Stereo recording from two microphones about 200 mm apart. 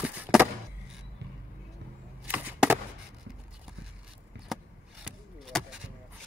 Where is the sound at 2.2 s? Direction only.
10° right (ahead or behind).